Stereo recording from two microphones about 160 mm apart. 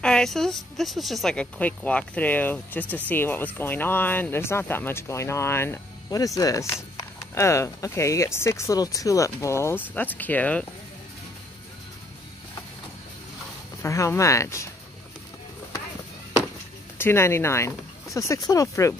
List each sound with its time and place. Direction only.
0.0 s speech: 5° left (ahead or behind)
13.8 s speech: 20° left (ahead or behind)
17.0 s speech: 15° left (ahead or behind)